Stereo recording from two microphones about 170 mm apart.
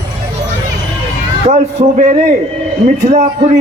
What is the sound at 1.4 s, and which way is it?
Speech, 40° right (ahead or behind).